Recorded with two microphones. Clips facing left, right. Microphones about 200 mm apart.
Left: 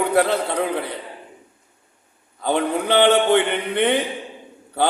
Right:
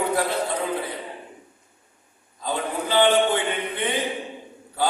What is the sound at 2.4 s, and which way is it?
A man's voice, 70° left (ahead or behind).